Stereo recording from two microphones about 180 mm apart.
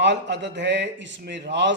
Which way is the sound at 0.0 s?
75° right (ahead or behind).